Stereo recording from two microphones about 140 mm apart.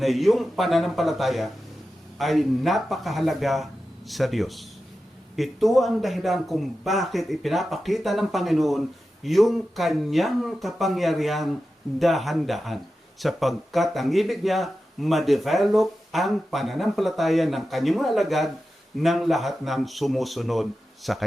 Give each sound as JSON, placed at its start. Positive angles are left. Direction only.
{"t": 0.0, "sound": "speech", "side_deg": 0}